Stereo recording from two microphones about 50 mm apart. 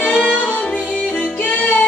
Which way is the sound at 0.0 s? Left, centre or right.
Centre.